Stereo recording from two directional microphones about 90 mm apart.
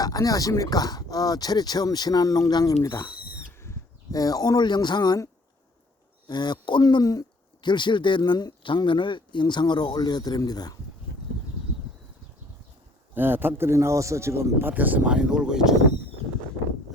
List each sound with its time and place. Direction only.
0.0 s speech: 45° left (ahead or behind)
2.8 s speech: 30° left (ahead or behind)
4.1 s speech: 45° left (ahead or behind)
6.2 s a man's voice: 55° left (ahead or behind)
13.1 s speech: 25° right (ahead or behind)
14.7 s speech: 20° right (ahead or behind)